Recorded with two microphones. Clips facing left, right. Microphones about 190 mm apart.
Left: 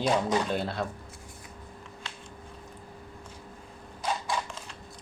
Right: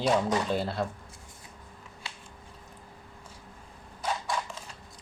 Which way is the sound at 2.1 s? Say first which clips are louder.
Right 1 dB; 10° right (ahead or behind).